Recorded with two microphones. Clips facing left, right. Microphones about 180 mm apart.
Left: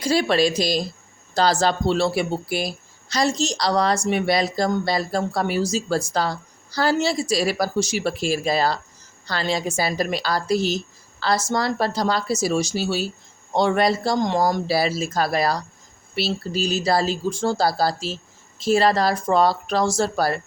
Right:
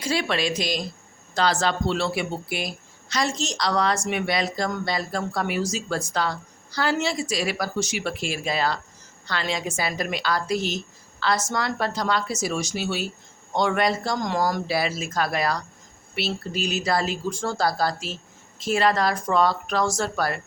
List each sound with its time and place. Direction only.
0.0 s a woman's voice: 40° left (ahead or behind); by 14.6 s 25° left (ahead or behind)
14.7 s speech: 35° left (ahead or behind)